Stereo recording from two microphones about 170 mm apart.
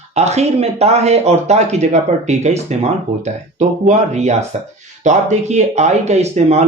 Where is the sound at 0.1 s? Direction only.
40° right (ahead or behind).